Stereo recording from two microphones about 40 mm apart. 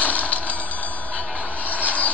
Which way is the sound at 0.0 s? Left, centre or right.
Left.